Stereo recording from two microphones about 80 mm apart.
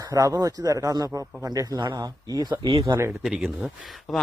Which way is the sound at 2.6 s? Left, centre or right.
Right.